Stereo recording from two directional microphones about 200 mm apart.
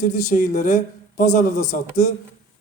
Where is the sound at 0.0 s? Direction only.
40° left (ahead or behind).